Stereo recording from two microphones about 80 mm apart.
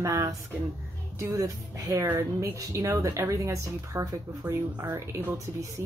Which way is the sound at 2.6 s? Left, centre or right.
Right.